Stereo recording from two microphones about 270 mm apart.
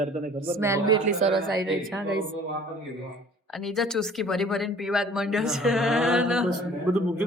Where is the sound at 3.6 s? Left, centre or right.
Centre.